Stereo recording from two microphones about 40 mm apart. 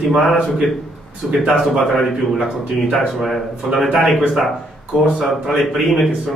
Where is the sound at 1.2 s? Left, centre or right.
Centre.